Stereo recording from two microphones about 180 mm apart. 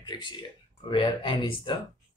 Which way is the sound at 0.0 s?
25° left (ahead or behind).